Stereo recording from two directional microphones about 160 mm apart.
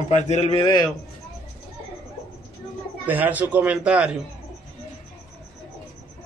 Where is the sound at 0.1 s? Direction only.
40° left (ahead or behind); by 0.9 s 25° left (ahead or behind).